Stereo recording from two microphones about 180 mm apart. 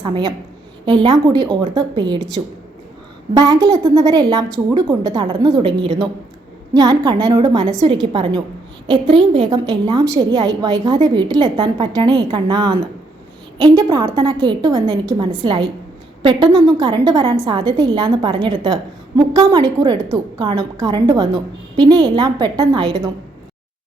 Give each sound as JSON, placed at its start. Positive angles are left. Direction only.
{"t": 0.0, "sound": "a woman's voice", "side_deg": -25}
{"t": 3.3, "sound": "a woman's voice", "side_deg": -20}
{"t": 5.2, "sound": "a woman's voice", "side_deg": -30}